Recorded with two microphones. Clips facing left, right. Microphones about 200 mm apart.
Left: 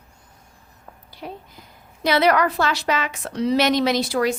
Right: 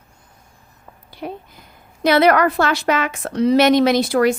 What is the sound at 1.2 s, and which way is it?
A woman's voice, 55° right (ahead or behind).